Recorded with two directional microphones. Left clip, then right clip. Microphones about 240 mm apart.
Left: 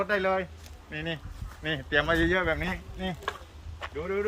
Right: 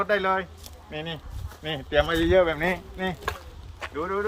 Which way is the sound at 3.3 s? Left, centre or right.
Right.